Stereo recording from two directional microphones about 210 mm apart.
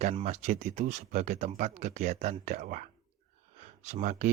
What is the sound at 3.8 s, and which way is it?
Speech, 35° right (ahead or behind).